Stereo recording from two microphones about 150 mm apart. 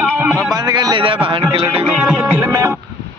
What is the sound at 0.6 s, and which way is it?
Speech, 25° right (ahead or behind).